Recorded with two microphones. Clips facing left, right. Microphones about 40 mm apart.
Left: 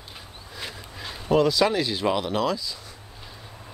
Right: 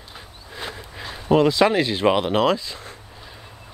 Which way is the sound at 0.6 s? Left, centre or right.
Right.